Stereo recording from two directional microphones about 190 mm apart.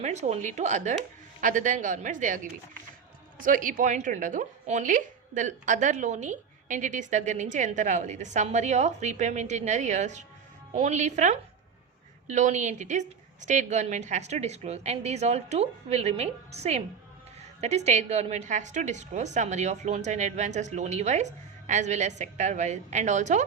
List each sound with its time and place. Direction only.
0.0 s a woman's voice: 35° right (ahead or behind)